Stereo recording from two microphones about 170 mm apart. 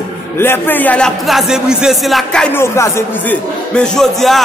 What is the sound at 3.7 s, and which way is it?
Speech, 5° left (ahead or behind).